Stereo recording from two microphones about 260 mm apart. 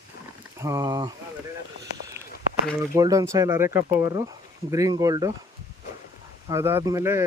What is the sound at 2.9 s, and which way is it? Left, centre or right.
Speech, centre.